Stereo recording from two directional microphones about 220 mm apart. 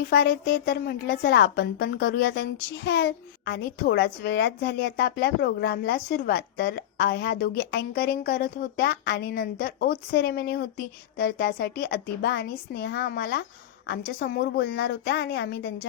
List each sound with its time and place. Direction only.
0.0 s a woman's voice: 45° left (ahead or behind)